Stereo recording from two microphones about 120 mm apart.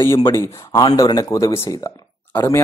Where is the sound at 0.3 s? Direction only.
25° left (ahead or behind).